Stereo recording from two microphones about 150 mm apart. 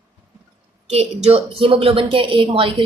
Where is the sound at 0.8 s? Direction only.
45° right (ahead or behind).